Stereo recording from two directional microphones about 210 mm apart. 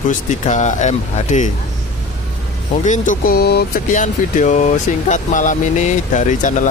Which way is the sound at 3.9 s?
35° left (ahead or behind).